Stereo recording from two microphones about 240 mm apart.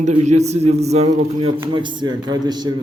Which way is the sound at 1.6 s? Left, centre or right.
Centre.